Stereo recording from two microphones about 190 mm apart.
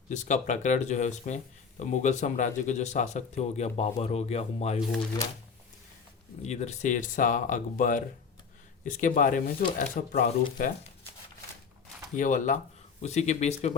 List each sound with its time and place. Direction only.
0.1 s speech: 40° left (ahead or behind)
6.4 s speech: 35° left (ahead or behind)
12.1 s speech: 45° left (ahead or behind)